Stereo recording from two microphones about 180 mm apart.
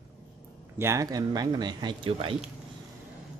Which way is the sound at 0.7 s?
15° right (ahead or behind).